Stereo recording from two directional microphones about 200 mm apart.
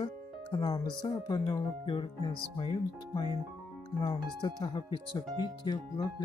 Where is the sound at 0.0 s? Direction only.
20° left (ahead or behind).